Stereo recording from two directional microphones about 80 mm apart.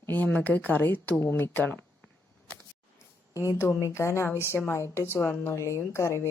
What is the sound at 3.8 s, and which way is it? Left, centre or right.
A woman's voice, left.